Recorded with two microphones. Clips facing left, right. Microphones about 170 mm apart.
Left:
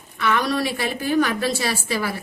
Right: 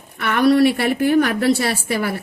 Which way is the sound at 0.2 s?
60° right (ahead or behind).